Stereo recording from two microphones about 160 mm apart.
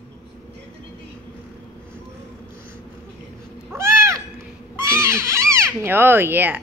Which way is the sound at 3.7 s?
15° right (ahead or behind).